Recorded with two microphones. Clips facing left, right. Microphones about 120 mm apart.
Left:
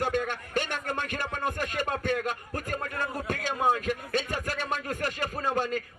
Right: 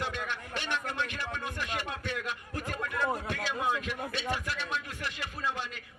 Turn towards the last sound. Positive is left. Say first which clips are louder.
# left 7 dB
turn(degrees=45)  # may be behind; listen again after turning